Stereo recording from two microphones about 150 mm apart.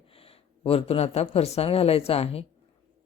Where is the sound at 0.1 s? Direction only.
40° left (ahead or behind).